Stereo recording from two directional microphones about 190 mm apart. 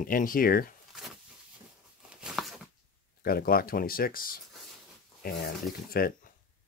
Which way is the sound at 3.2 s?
50° left (ahead or behind).